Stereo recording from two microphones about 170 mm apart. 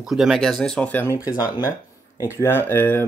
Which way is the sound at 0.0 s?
Centre (ahead or behind).